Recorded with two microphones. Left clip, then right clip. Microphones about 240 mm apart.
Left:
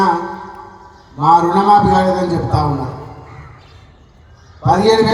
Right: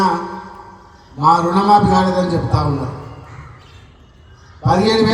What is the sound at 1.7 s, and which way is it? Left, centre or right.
Music, right.